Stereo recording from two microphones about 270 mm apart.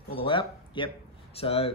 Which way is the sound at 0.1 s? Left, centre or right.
Centre.